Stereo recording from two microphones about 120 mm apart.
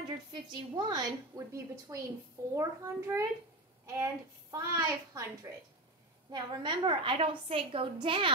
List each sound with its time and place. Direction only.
0.0 s a woman's voice: 40° right (ahead or behind)
6.3 s a woman's voice: 40° right (ahead or behind)